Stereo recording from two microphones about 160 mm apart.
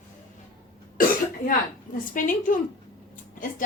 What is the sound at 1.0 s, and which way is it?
A woman's voice, 60° left (ahead or behind).